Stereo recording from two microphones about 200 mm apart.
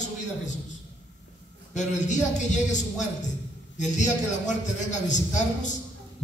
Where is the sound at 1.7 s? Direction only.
35° left (ahead or behind).